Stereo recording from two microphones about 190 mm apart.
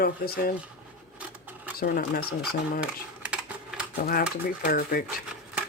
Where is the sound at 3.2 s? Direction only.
5° right (ahead or behind).